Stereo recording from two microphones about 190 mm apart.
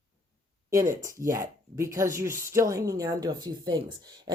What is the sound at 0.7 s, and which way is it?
Speech, 15° right (ahead or behind).